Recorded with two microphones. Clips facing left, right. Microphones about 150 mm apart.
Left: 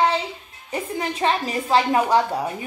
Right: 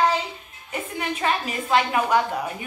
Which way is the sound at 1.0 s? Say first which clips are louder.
Left 2 dB; 30° left (ahead or behind).